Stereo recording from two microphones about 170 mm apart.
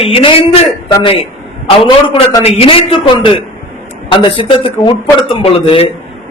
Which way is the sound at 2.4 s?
35° left (ahead or behind).